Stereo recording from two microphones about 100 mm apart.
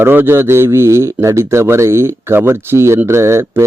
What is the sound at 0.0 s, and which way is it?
Speech, 20° right (ahead or behind).